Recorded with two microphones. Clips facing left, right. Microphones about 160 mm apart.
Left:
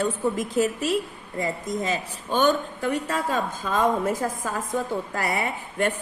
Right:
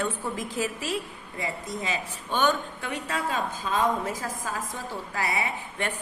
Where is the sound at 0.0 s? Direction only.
40° left (ahead or behind).